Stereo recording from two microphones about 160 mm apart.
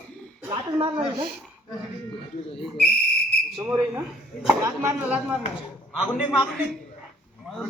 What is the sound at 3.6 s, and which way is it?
Speech, 15° right (ahead or behind).